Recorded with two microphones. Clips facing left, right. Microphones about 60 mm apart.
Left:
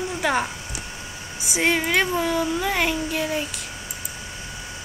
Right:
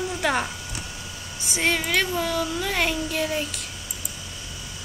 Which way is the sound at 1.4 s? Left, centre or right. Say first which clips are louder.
Left 3 dB; centre.